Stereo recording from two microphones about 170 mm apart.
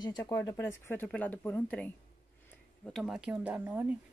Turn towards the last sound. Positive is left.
turn(degrees=-10)  # may be behind; listen again after turning